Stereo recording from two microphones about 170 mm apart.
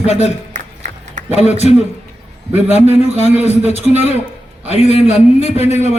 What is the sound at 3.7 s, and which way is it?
A man's voice, 40° left (ahead or behind).